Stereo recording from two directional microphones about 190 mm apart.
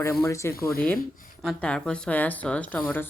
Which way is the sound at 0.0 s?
15° left (ahead or behind).